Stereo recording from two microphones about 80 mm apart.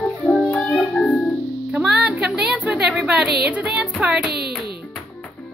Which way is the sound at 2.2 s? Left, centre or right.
Centre.